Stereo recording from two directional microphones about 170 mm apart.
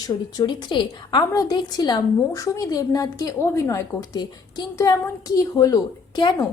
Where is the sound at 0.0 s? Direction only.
25° left (ahead or behind).